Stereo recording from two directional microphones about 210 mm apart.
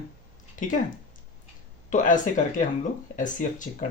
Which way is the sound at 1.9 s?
35° left (ahead or behind).